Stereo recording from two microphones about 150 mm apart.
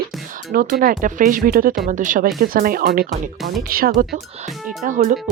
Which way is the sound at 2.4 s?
70° right (ahead or behind).